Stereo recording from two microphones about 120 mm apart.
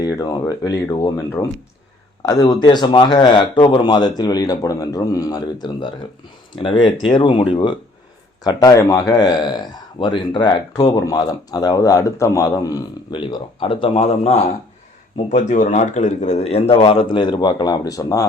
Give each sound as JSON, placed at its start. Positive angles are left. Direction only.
{"t": 0.0, "sound": "a man's voice", "side_deg": 30}
{"t": 8.4, "sound": "speech", "side_deg": 30}
{"t": 15.1, "sound": "a man's voice", "side_deg": 75}